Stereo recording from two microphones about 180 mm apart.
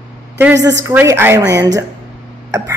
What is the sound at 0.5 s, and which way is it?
Speech, 80° right.